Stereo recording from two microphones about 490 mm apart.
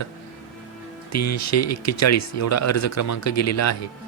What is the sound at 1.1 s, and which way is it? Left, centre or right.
Speech, left.